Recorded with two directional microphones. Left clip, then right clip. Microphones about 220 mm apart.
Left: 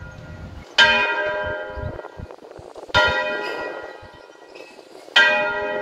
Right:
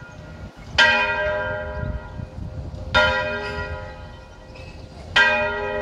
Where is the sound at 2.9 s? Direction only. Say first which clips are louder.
Even; 45° left (ahead or behind).